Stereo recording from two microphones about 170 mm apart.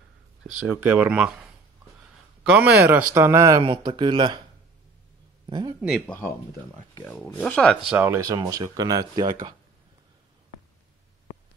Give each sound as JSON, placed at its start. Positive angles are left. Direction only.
{"t": 0.4, "sound": "speech", "side_deg": -10}
{"t": 2.4, "sound": "speech", "side_deg": -10}
{"t": 5.5, "sound": "speech", "side_deg": -25}
{"t": 5.8, "sound": "speech", "side_deg": -5}
{"t": 7.3, "sound": "speech", "side_deg": 5}
{"t": 7.9, "sound": "speech", "side_deg": -15}